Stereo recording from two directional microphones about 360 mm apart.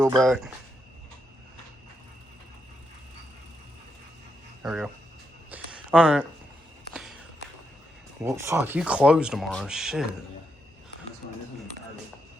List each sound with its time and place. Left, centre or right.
0.2 s speech: centre
4.6 s speech: centre
5.5 s a sound: centre
6.9 s walk: centre
8.2 s speech: centre